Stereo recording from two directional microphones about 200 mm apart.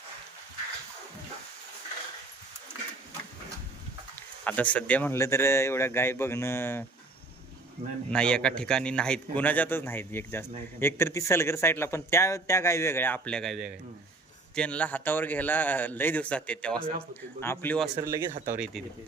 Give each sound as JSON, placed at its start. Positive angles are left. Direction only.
{"t": 4.1, "sound": "a man's voice", "side_deg": 10}
{"t": 8.1, "sound": "a man's voice", "side_deg": 5}
{"t": 17.9, "sound": "speech", "side_deg": -15}